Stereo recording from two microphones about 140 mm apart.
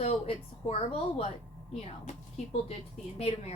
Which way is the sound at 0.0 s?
50° left (ahead or behind).